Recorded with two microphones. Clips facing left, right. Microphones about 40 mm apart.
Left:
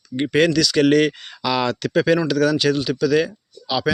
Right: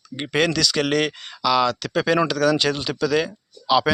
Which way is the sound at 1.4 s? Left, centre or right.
Centre.